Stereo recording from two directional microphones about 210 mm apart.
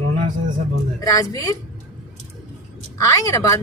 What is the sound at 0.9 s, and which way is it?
Speech, 15° left (ahead or behind).